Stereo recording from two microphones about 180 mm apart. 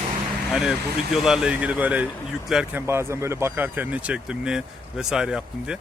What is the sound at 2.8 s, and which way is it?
Speech, 15° right (ahead or behind).